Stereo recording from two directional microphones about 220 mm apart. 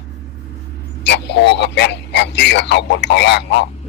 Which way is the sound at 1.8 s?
50° left (ahead or behind).